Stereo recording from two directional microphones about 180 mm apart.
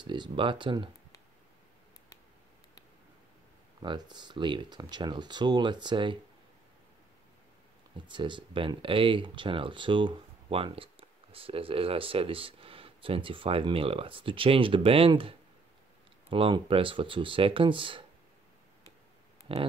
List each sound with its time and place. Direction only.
0.0 s speech: 25° right (ahead or behind)
3.8 s speech: 25° right (ahead or behind)
8.1 s speech: 25° right (ahead or behind)
19.5 s speech: 30° right (ahead or behind)